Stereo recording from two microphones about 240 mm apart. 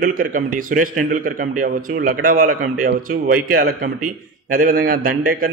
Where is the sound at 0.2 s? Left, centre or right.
Right.